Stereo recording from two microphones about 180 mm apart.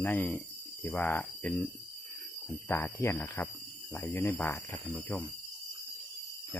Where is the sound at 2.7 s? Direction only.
15° left (ahead or behind).